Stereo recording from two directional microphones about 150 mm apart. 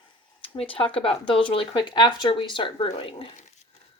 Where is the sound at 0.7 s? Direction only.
35° left (ahead or behind).